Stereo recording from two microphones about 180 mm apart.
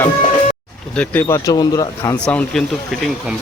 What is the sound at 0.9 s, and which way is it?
Speech, 10° left (ahead or behind).